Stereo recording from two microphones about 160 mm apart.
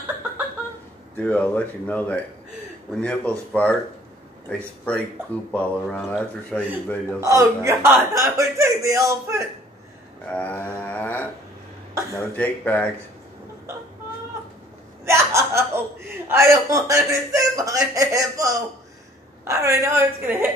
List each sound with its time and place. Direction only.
1.1 s speech: 10° left (ahead or behind)
7.2 s a man's voice: 20° right (ahead or behind)
10.3 s a sound: 10° left (ahead or behind)
12.4 s speech: 10° left (ahead or behind)
15.0 s chuckle: 15° right (ahead or behind)
16.3 s a man's voice: 20° right (ahead or behind)